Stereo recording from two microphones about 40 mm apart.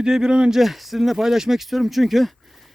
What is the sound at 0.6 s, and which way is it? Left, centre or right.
Speech, centre.